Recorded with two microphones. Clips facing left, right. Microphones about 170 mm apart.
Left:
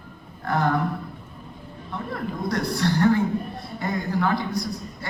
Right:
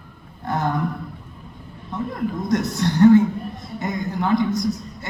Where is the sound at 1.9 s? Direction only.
20° right (ahead or behind).